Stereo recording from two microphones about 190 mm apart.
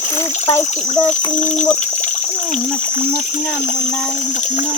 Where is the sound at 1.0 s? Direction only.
40° left (ahead or behind).